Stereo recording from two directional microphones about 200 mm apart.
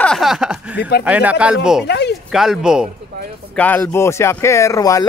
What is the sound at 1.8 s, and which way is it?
Speech, 55° left (ahead or behind).